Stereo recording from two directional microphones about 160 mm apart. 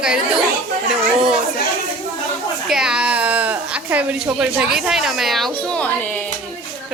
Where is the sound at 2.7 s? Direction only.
5° right (ahead or behind).